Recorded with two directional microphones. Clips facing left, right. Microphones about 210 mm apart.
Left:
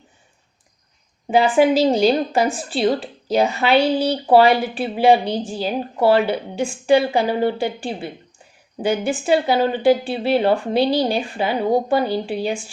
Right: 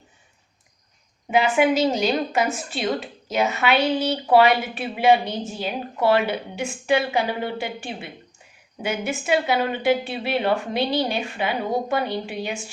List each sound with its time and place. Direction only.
1.3 s a woman's voice: 30° left (ahead or behind)